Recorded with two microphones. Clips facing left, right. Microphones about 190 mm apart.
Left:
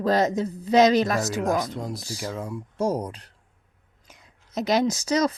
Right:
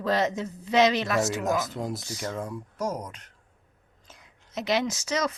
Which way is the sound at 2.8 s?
30° left (ahead or behind).